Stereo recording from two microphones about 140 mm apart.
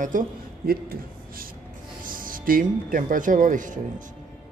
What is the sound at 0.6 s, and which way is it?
Speech, 90° right.